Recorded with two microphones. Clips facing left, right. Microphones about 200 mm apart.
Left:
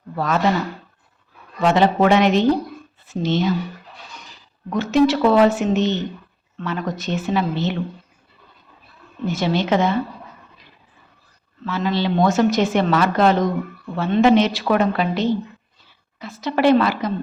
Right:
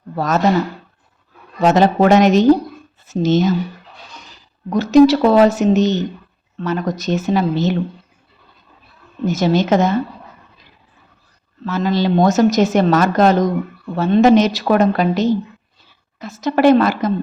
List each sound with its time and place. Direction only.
0.2 s a woman's voice: 40° right (ahead or behind)
1.6 s a woman's voice: 40° right (ahead or behind)
4.7 s a woman's voice: 40° right (ahead or behind)
9.2 s a woman's voice: 45° right (ahead or behind)
11.6 s a woman's voice: 40° right (ahead or behind)